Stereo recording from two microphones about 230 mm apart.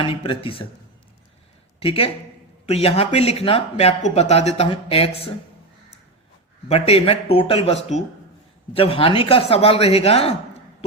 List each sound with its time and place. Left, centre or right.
0.0 s speech: left
1.8 s speech: left
6.7 s speech: left